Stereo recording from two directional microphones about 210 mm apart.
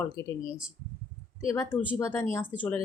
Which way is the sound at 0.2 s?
15° left (ahead or behind).